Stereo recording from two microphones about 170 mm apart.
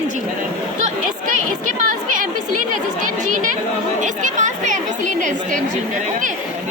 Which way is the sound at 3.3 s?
50° right (ahead or behind).